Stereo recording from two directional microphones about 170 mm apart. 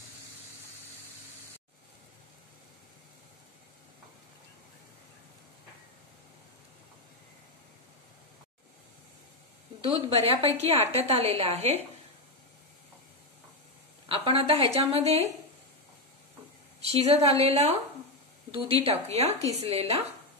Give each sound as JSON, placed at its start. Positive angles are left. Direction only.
{"t": 9.8, "sound": "a woman's voice", "side_deg": -35}
{"t": 14.0, "sound": "a woman's voice", "side_deg": -30}
{"t": 16.8, "sound": "a woman's voice", "side_deg": -35}